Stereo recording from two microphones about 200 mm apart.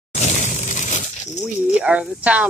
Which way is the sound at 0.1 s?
35° left (ahead or behind).